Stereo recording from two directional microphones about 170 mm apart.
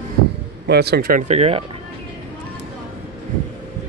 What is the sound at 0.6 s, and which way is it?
Speech, 70° right (ahead or behind).